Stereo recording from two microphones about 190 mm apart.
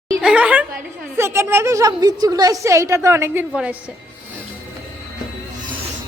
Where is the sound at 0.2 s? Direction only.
5° right (ahead or behind).